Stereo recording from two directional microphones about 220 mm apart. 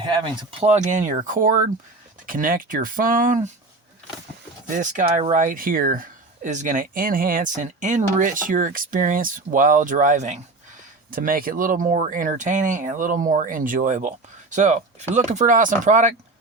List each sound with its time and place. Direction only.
0.6 s speech: 30° right (ahead or behind)
4.7 s speech: 35° right (ahead or behind)